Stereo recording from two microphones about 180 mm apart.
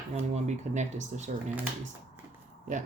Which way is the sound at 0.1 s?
40° right (ahead or behind).